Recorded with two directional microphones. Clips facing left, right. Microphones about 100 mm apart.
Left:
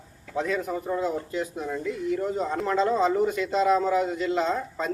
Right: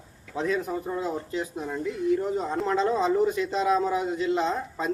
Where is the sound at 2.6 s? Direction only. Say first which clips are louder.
Left 1 dB; 30° right (ahead or behind).